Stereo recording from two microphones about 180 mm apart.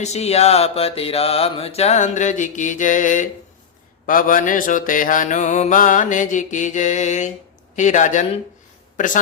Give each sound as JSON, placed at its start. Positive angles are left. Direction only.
{"t": 0.0, "sound": "mantra", "side_deg": 35}